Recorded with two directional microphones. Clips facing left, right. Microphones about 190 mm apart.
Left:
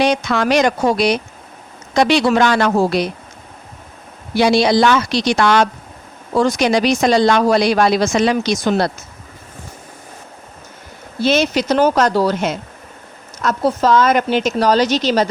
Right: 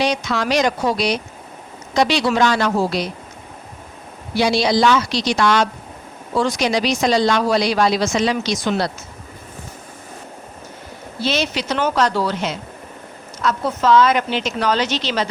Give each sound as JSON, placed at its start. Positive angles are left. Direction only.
{"t": 0.0, "sound": "a woman's voice", "side_deg": 55}
{"t": 4.4, "sound": "a woman's voice", "side_deg": 55}
{"t": 6.3, "sound": "speech", "side_deg": 45}
{"t": 11.2, "sound": "speech", "side_deg": 50}